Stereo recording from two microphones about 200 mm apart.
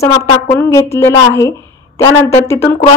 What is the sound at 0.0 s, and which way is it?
Speech, 15° left (ahead or behind).